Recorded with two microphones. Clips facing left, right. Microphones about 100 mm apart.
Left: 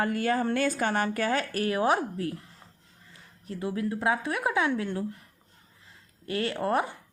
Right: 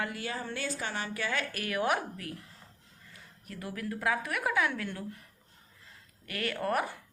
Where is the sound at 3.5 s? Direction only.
25° left (ahead or behind).